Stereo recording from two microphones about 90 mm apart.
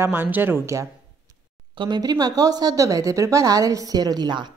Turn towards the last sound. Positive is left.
turn(degrees=-55)  # may be behind; listen again after turning